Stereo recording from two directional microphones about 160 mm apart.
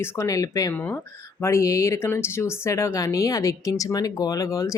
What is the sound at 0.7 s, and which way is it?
Speech, 10° left (ahead or behind).